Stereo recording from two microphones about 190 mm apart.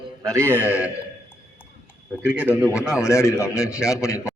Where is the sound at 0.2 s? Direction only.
15° right (ahead or behind).